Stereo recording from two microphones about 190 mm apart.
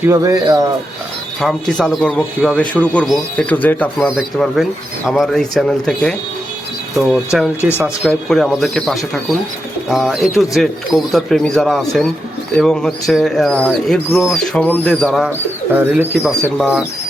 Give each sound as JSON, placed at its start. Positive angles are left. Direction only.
{"t": 0.1, "sound": "speech", "side_deg": -20}
{"t": 1.4, "sound": "speech", "side_deg": 0}
{"t": 4.1, "sound": "speech", "side_deg": 0}
{"t": 7.6, "sound": "speech", "side_deg": -5}
{"t": 15.7, "sound": "speech", "side_deg": -10}